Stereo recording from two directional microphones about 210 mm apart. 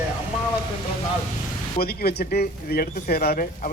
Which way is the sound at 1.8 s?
45° left (ahead or behind).